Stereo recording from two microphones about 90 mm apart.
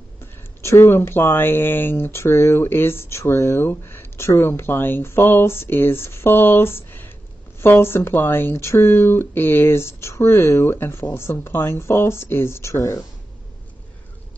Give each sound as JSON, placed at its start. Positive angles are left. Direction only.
{"t": 0.6, "sound": "speech", "side_deg": 30}